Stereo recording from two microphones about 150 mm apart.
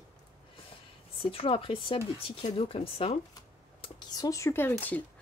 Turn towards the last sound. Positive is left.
turn(degrees=15)  # may be behind; listen again after turning